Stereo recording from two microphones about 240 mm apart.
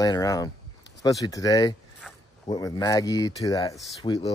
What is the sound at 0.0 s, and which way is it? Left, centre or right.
Speech, centre.